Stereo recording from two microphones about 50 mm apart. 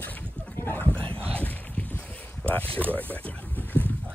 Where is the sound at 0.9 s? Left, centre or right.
Left.